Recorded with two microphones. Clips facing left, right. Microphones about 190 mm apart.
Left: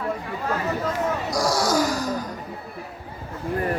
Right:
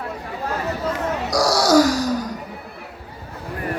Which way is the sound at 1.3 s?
80° right.